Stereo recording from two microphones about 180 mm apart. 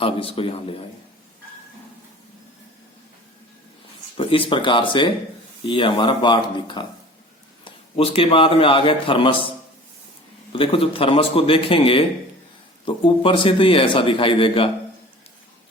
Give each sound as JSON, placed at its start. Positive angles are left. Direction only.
{"t": 0.0, "sound": "speech", "side_deg": 30}
{"t": 4.2, "sound": "a man's voice", "side_deg": 30}
{"t": 10.5, "sound": "a man's voice", "side_deg": 30}